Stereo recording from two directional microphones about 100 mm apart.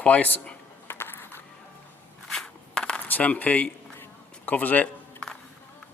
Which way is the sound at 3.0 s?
15° left (ahead or behind).